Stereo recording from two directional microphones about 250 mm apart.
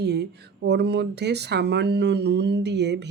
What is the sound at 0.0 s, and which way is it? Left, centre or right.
Speech, right.